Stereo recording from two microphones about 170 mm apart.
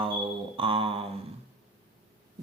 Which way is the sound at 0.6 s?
35° right (ahead or behind).